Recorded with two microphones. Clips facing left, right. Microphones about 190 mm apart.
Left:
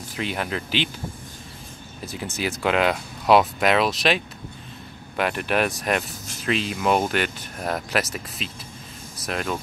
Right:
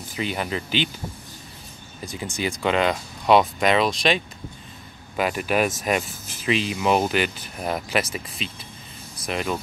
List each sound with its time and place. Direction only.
0.1 s speech: centre (ahead or behind)
2.0 s speech: 5° left (ahead or behind)